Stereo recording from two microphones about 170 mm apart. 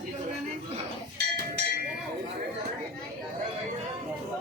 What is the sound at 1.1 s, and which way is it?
Cowbell, 80° right.